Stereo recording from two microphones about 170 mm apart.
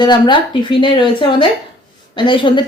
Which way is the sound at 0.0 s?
25° left (ahead or behind).